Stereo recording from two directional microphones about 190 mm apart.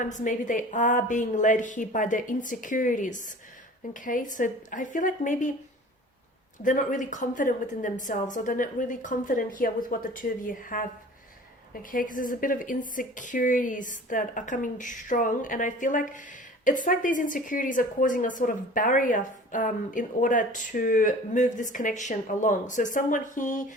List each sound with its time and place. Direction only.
0.0 s a woman's voice: 40° left (ahead or behind)
6.6 s a woman's voice: 40° left (ahead or behind)